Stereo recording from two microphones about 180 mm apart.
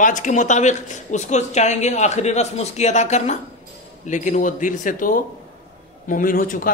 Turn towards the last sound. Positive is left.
turn(degrees=50)  # may be behind; listen again after turning